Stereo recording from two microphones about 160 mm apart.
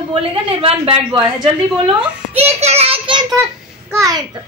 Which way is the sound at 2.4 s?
40° right (ahead or behind).